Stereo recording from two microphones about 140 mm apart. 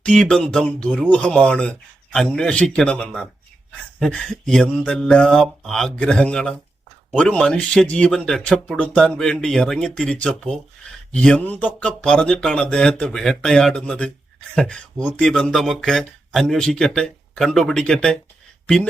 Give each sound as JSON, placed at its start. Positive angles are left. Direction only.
{"t": 0.0, "sound": "speech", "side_deg": 5}